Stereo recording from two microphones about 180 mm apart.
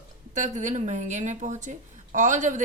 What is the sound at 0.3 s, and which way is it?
A woman's voice, 45° right (ahead or behind).